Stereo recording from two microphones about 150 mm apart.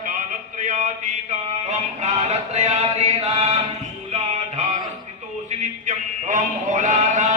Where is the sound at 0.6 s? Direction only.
60° right (ahead or behind).